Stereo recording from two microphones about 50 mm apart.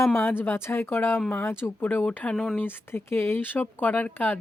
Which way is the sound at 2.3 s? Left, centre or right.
Centre.